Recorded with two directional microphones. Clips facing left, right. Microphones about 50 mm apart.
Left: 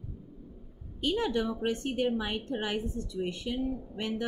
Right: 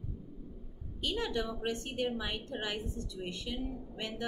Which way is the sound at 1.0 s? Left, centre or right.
Left.